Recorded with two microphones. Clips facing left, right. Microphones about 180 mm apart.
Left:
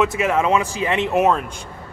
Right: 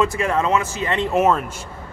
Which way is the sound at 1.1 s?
Centre (ahead or behind).